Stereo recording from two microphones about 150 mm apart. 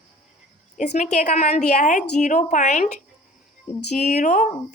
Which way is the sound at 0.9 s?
50° left (ahead or behind).